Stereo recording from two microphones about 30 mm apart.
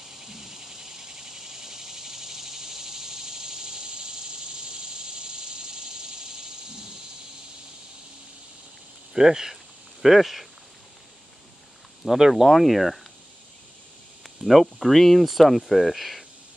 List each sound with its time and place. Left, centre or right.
0.0 s cricket: centre
4.6 s a sound: right
9.1 s speech: centre
10.0 s speech: centre
12.1 s speech: centre
14.4 s speech: centre